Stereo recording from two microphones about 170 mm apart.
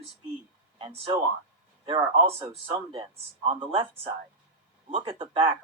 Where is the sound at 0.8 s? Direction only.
30° right (ahead or behind).